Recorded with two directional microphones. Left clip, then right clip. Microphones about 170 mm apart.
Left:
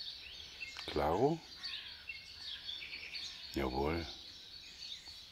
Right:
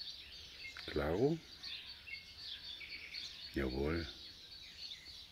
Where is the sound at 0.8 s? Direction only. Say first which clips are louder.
Left 4 dB; 45° left (ahead or behind).